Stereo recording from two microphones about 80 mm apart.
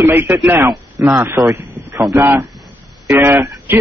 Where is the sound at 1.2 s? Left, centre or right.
Right.